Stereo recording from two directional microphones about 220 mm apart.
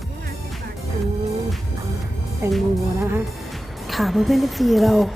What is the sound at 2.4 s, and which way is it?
Speech, 10° right (ahead or behind).